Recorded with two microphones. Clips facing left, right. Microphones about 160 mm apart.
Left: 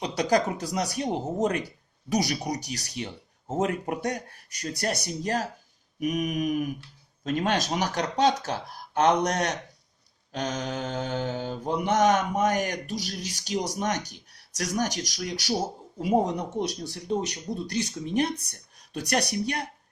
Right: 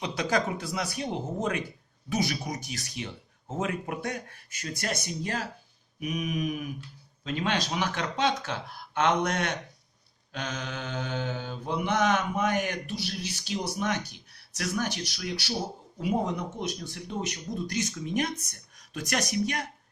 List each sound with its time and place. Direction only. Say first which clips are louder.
0.0 s mantra: left 4 dB; 40° left (ahead or behind)